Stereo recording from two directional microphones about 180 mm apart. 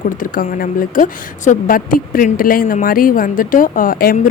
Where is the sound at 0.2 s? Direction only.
50° left (ahead or behind).